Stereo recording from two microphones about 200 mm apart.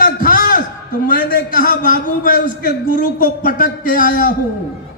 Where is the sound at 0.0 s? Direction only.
45° left (ahead or behind).